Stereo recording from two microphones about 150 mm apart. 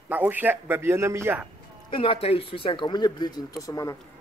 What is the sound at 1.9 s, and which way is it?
Speech, 35° left (ahead or behind).